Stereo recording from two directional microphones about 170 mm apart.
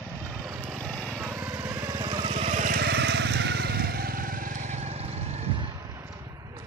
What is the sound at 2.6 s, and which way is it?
Vehicle, 70° right (ahead or behind).